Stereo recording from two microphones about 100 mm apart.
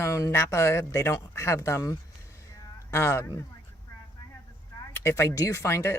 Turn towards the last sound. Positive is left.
turn(degrees=25)  # may be behind; listen again after turning